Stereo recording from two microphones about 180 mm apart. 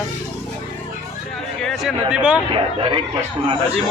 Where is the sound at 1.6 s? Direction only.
Centre (ahead or behind).